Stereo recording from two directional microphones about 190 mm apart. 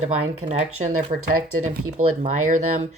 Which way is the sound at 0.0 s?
35° right (ahead or behind).